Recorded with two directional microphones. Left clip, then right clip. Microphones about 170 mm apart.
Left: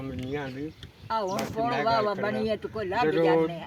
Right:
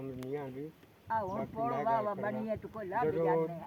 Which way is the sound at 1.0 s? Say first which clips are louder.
Left 6 dB; centre (ahead or behind).